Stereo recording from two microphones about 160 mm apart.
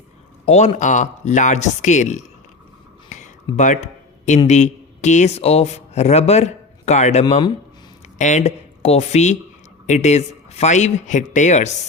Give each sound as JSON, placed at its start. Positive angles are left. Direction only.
{"t": 0.4, "sound": "speech", "side_deg": 45}
{"t": 3.1, "sound": "a sound", "side_deg": 50}
{"t": 3.5, "sound": "speech", "side_deg": 30}
{"t": 4.4, "sound": "a man's voice", "side_deg": 45}